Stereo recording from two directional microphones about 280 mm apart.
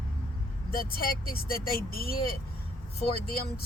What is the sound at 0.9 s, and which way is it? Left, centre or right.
Speech, left.